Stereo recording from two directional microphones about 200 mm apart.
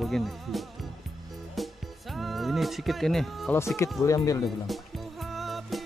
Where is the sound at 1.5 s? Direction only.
Centre (ahead or behind).